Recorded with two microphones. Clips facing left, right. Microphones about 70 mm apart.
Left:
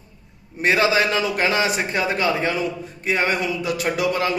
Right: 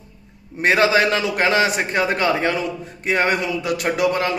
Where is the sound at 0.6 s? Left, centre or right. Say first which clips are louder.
Right 2 dB; right.